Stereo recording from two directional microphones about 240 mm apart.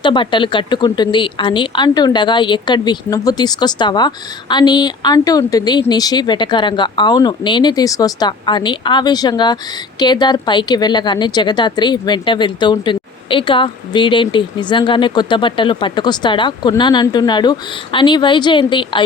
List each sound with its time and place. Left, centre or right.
0.0 s a woman's voice: centre